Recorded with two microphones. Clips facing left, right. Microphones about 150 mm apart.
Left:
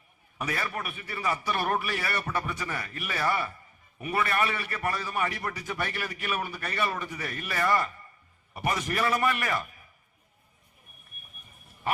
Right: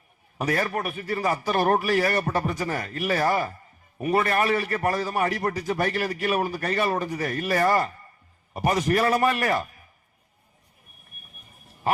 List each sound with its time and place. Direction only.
0.3 s a man's voice: 40° right (ahead or behind)